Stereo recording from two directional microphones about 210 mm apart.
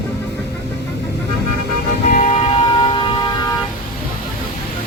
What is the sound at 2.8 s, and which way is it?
Civil defense siren, 25° left (ahead or behind).